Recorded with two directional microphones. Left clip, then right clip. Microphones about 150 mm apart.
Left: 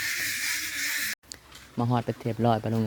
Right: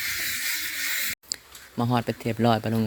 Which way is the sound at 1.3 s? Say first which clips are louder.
Right 11 dB; 25° left (ahead or behind).